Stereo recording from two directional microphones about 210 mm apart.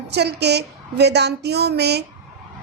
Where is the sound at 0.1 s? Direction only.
50° right (ahead or behind).